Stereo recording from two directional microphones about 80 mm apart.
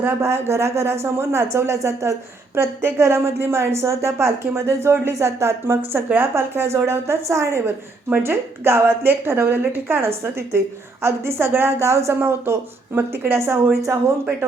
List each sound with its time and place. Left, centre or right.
0.0 s speech: right